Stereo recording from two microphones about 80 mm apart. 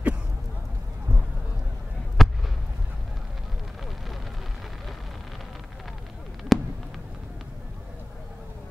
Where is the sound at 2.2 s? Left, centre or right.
Centre.